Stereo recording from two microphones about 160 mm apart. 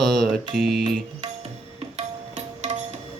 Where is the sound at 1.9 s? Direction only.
45° right (ahead or behind).